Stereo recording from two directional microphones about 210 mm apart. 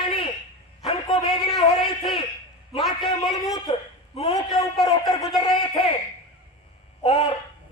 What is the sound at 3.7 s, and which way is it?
A man's voice, 25° left (ahead or behind).